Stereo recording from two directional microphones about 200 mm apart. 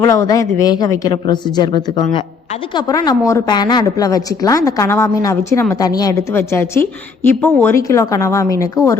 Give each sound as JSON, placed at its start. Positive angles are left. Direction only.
{"t": 0.0, "sound": "a woman's voice", "side_deg": 20}